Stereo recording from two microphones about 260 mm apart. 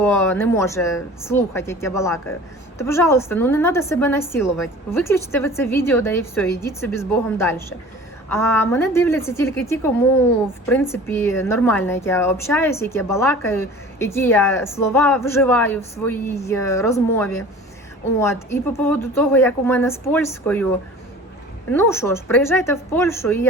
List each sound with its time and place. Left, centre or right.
0.0 s a woman's voice: centre
21.7 s a woman's voice: centre